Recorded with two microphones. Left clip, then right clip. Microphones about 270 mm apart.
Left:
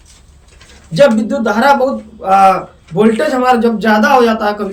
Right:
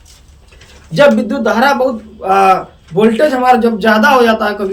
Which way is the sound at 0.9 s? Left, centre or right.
Centre.